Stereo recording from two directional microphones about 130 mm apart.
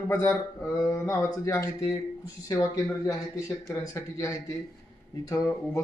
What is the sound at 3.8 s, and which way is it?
A man's voice, 25° left (ahead or behind).